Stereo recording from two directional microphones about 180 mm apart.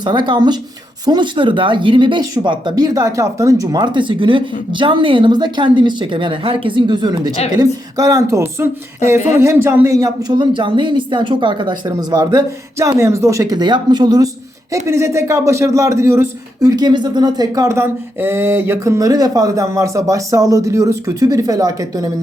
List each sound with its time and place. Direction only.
0.0 s speech: 25° right (ahead or behind)
9.0 s speech: 40° left (ahead or behind)
9.4 s speech: 15° right (ahead or behind)